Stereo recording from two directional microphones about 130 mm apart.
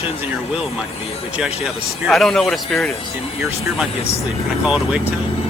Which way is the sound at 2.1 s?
5° left (ahead or behind).